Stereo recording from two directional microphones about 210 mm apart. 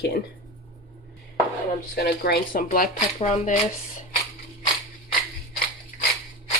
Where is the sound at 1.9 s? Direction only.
50° left (ahead or behind); by 3.5 s 35° left (ahead or behind).